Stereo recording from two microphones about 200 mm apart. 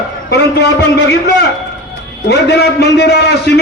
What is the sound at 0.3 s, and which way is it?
A man's voice, 55° left (ahead or behind).